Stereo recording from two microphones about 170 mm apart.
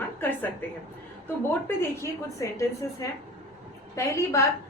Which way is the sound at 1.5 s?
15° left (ahead or behind).